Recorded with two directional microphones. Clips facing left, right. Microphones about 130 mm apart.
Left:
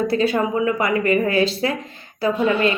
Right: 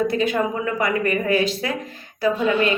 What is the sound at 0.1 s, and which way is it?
Speech, 30° left (ahead or behind).